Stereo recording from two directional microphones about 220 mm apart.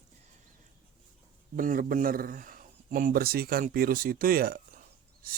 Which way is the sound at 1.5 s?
40° right (ahead or behind).